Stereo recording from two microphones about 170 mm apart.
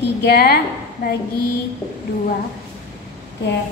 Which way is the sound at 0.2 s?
65° left (ahead or behind).